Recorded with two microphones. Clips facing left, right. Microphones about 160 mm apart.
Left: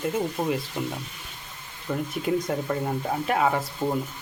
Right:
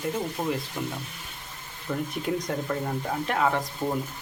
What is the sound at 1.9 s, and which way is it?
Speech, 5° left (ahead or behind).